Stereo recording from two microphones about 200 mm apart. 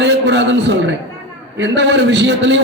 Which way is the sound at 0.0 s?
60° right (ahead or behind).